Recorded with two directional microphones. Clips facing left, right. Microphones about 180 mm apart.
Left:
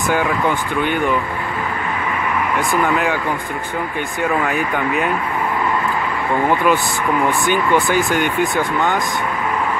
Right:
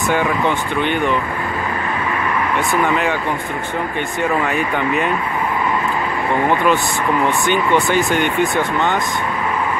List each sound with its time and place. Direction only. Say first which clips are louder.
0.1 s speech: even; 5° left (ahead or behind)
2.5 s speech: even; centre (ahead or behind)
4.2 s speech: even; 5° left (ahead or behind)
7.9 s speech: right 1 dB; 5° left (ahead or behind)
8.5 s speech: even; 20° right (ahead or behind)